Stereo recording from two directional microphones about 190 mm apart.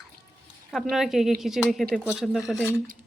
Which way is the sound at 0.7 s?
Centre (ahead or behind).